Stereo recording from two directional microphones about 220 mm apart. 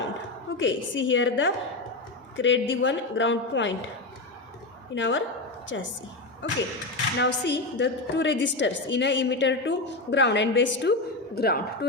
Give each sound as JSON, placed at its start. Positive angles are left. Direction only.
{"t": 0.5, "sound": "a woman's voice", "side_deg": 60}
{"t": 4.9, "sound": "a woman's voice", "side_deg": 60}
{"t": 11.3, "sound": "speech", "side_deg": 45}